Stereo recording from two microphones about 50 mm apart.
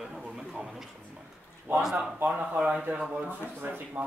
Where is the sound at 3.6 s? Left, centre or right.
Right.